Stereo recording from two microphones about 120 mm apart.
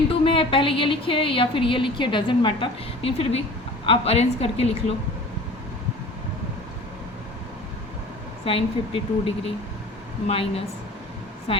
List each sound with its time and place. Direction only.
0.1 s a woman's voice: 45° left (ahead or behind)
8.4 s a woman's voice: 50° left (ahead or behind)